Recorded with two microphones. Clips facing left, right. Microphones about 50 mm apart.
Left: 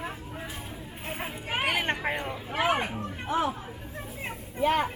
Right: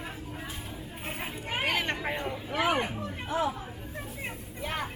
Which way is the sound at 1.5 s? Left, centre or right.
Left.